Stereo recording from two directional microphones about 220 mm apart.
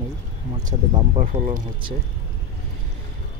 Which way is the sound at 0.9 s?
30° right (ahead or behind).